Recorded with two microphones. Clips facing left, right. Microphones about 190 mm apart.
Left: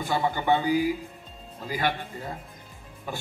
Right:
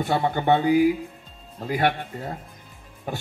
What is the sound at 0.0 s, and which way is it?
A man's voice, 60° right (ahead or behind).